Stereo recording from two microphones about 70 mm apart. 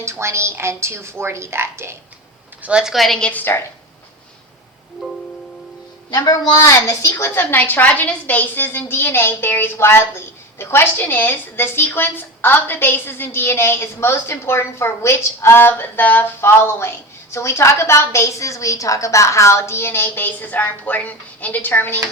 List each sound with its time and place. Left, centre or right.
0.0 s a woman's voice: right
2.6 s a woman's voice: centre
2.9 s a woman's voice: centre
3.2 s a woman's voice: centre
6.1 s a woman's voice: left
6.6 s a woman's voice: left
7.1 s a woman's voice: left